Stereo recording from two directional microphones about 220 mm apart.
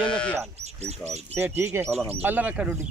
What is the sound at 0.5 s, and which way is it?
Speech, 30° right (ahead or behind).